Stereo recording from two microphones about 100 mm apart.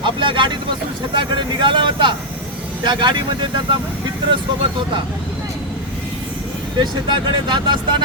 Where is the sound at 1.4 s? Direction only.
50° right (ahead or behind).